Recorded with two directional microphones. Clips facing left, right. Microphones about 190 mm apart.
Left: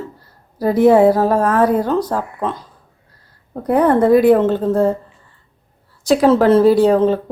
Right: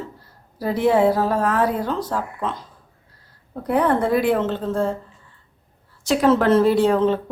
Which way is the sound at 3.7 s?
40° left (ahead or behind).